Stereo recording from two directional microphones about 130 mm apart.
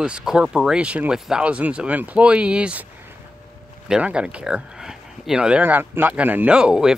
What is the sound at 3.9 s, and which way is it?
Speech, 10° right (ahead or behind).